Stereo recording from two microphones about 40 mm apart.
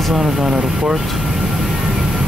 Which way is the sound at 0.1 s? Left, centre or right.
Centre.